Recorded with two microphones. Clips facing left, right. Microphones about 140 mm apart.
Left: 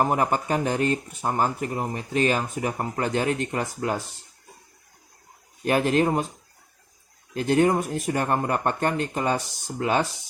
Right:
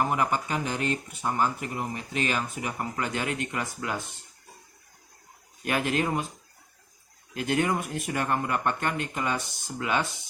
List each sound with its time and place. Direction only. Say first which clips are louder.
0.0 s speech: left 4 dB; 40° left (ahead or behind)
5.6 s speech: left 6 dB; 35° left (ahead or behind)
7.3 s speech: left 6 dB; 35° left (ahead or behind)